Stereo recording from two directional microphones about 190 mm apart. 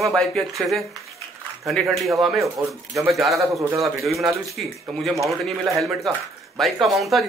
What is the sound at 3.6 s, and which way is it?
Speech, 15° right (ahead or behind).